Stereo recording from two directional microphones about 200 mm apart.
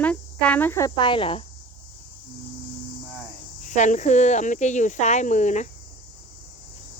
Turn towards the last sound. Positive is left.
turn(degrees=35)  # may be behind; listen again after turning